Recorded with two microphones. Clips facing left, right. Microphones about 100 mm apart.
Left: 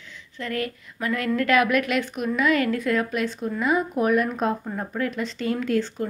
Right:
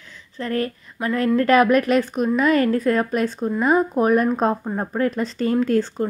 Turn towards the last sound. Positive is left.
turn(degrees=-35)  # may be behind; listen again after turning